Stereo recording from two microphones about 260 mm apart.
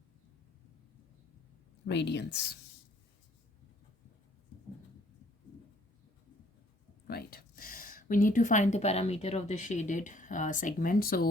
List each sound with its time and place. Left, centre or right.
1.9 s speech: left
7.1 s speech: left